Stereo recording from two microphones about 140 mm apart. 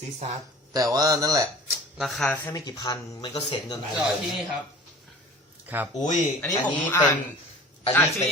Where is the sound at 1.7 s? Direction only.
Centre (ahead or behind); by 3.3 s 30° left (ahead or behind).